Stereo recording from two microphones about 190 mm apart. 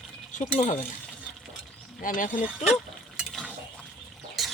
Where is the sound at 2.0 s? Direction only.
45° left (ahead or behind).